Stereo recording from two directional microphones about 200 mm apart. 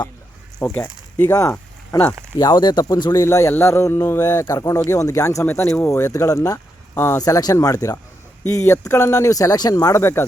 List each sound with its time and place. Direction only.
0.6 s speech: 10° left (ahead or behind)
2.4 s a man's voice: 20° left (ahead or behind)